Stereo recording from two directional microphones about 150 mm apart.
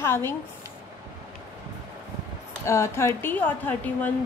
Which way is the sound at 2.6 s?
20° left (ahead or behind).